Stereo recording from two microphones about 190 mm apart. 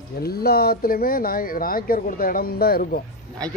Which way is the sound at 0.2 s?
55° left (ahead or behind).